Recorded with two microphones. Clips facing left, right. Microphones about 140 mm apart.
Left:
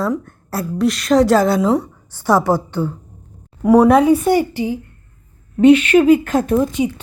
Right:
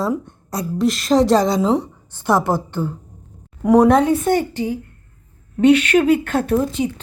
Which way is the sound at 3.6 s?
5° left (ahead or behind).